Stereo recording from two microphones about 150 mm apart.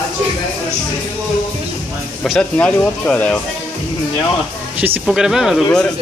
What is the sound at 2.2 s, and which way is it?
Speech, 5° left (ahead or behind).